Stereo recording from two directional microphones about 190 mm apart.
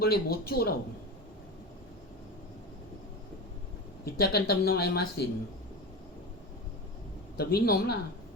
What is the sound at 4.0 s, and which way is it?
Speech, 55° left (ahead or behind).